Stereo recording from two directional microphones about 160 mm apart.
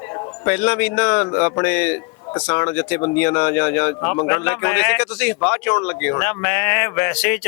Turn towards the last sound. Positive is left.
turn(degrees=10)  # may be behind; listen again after turning